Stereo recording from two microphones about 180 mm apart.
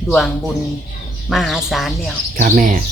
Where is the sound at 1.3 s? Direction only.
Centre (ahead or behind).